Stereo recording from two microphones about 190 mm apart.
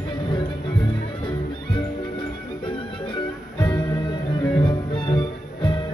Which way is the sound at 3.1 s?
25° left (ahead or behind).